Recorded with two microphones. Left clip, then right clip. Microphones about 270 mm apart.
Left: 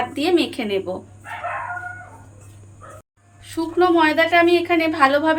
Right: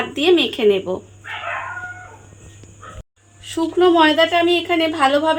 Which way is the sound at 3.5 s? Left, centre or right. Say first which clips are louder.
Right 2 dB; right.